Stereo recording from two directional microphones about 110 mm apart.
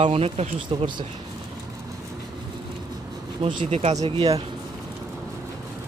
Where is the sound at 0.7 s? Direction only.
55° right (ahead or behind).